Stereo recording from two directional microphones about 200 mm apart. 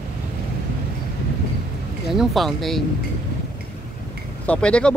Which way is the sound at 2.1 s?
Centre (ahead or behind).